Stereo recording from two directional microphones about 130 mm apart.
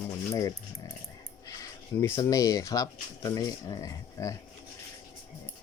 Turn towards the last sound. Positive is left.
turn(degrees=25)  # may be behind; listen again after turning